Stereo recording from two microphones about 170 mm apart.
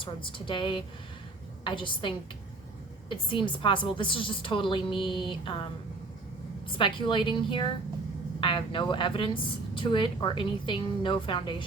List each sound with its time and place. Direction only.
0.0 s a woman's voice: 30° left (ahead or behind)
6.7 s a woman's voice: 30° left (ahead or behind)